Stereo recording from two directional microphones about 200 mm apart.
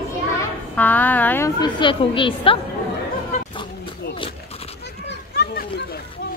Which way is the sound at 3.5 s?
25° left (ahead or behind).